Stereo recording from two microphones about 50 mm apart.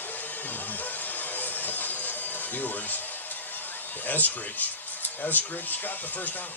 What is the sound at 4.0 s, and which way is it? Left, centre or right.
Speech, left.